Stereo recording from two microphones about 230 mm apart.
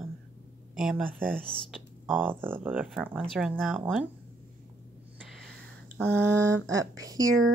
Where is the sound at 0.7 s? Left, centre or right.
Centre.